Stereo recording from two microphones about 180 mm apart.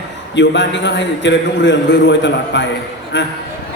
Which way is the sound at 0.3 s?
80° left.